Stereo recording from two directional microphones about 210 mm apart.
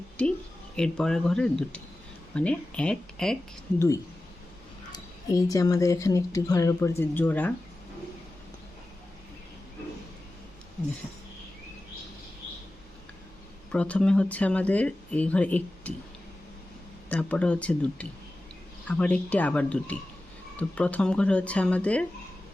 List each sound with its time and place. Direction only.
0.2 s speech: 5° left (ahead or behind)
3.8 s speech: 15° left (ahead or behind)
13.7 s speech: 5° left (ahead or behind)
17.1 s speech: 5° left (ahead or behind)